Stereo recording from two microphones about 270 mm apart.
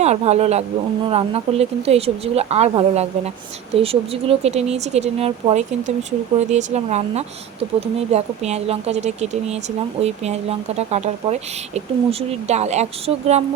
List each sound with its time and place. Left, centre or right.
0.0 s speech: right